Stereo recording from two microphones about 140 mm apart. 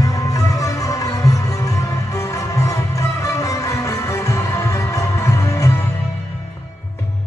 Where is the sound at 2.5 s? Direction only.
20° left (ahead or behind).